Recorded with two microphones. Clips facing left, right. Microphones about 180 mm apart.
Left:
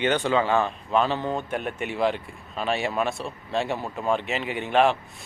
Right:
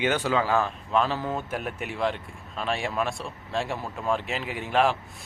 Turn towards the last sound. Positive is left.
turn(degrees=0)  # may be behind; listen again after turning